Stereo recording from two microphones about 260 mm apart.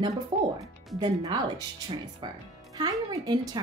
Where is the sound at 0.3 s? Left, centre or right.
Right.